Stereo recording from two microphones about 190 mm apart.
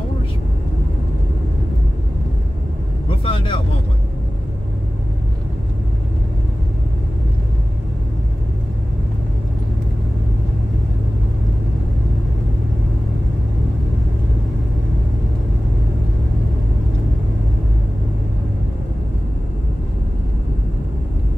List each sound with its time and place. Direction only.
3.1 s vehicle: 30° left (ahead or behind)